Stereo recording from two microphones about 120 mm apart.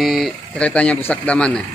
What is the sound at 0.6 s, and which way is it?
Speech, 10° left (ahead or behind).